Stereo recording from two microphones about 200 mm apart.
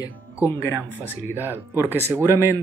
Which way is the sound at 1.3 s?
10° right (ahead or behind).